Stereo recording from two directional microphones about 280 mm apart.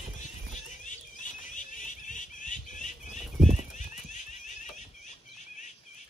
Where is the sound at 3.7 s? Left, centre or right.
Left.